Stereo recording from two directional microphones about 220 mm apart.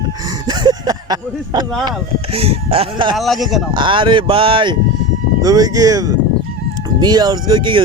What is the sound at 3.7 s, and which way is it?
Speech, 20° right (ahead or behind).